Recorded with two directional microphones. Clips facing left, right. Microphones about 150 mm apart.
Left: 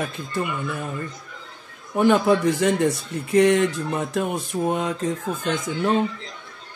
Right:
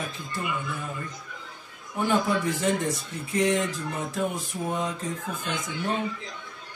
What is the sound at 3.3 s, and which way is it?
Speech, 65° left (ahead or behind).